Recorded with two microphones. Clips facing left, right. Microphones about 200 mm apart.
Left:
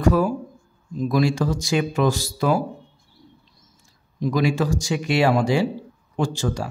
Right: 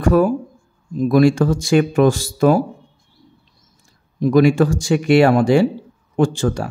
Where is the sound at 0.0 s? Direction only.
55° right (ahead or behind).